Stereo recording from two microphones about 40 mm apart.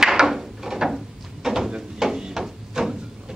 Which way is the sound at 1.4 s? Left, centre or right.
Centre.